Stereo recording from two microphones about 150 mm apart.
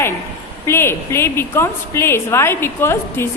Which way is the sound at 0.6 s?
15° left (ahead or behind).